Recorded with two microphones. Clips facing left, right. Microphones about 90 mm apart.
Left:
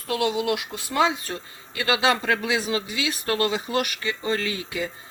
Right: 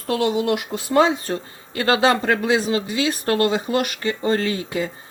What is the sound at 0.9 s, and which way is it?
A man's voice, 40° right (ahead or behind).